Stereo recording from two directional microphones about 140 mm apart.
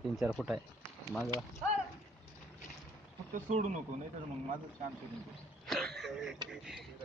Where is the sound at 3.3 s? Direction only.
60° right (ahead or behind).